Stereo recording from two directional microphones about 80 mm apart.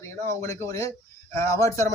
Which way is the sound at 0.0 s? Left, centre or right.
Left.